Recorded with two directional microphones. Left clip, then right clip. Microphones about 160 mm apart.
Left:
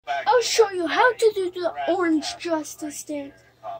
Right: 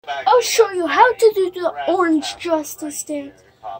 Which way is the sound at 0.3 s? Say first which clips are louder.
Right 5 dB; centre (ahead or behind).